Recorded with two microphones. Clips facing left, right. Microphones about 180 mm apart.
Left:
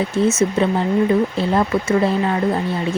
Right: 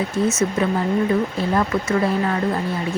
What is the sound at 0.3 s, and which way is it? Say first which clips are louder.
Speech: left 4 dB; 25° left (ahead or behind).